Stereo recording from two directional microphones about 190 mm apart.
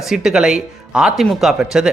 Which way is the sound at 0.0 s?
5° right (ahead or behind).